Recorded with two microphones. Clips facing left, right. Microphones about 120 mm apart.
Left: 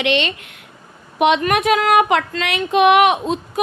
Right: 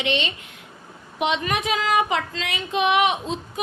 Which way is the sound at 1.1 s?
65° left (ahead or behind).